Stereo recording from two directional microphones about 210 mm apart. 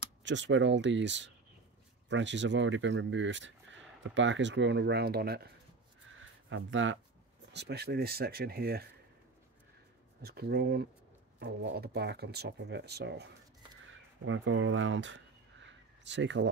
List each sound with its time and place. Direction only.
0.2 s speech: 60° right (ahead or behind)
6.5 s speech: 65° right (ahead or behind)
7.5 s speech: 50° right (ahead or behind)
10.2 s speech: 50° right (ahead or behind)
13.8 s crow: 70° right (ahead or behind)